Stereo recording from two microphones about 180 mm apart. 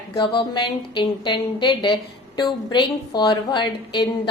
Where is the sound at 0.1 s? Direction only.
30° left (ahead or behind).